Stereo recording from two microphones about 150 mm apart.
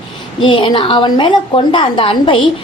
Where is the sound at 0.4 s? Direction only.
35° left (ahead or behind).